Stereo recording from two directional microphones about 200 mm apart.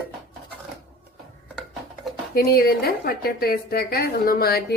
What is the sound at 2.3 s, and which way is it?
A woman's voice, 50° left (ahead or behind).